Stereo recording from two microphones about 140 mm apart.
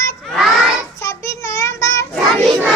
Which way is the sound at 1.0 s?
20° left (ahead or behind).